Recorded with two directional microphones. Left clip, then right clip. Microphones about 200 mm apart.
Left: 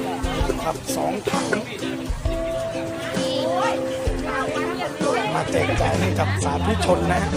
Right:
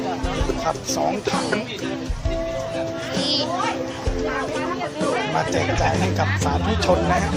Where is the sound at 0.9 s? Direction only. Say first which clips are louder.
Even; centre (ahead or behind).